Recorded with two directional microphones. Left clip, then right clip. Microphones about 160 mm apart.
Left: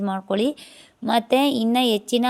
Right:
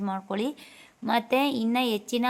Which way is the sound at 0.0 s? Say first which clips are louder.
Left 7 dB; 40° left (ahead or behind).